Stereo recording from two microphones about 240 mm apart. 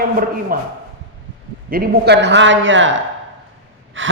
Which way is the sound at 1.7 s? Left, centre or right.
Right.